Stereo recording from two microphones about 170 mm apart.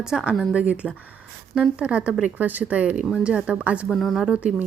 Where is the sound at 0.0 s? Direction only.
5° right (ahead or behind).